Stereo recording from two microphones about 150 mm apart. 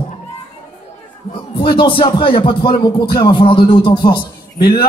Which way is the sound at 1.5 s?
35° left (ahead or behind).